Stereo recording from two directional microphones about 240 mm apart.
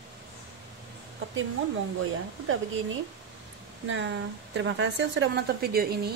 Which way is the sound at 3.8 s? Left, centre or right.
Right.